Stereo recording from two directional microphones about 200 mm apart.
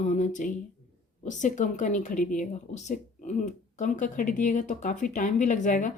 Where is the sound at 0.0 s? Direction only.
40° left (ahead or behind).